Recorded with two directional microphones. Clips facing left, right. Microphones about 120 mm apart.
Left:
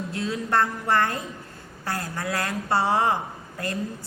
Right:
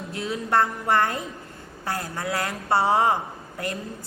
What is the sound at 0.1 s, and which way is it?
A woman's voice, 20° right (ahead or behind).